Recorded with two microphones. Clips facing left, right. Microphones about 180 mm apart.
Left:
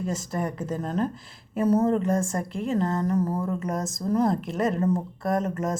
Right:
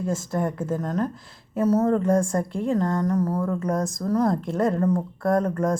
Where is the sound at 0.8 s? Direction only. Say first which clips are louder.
Right 1 dB; 30° left (ahead or behind).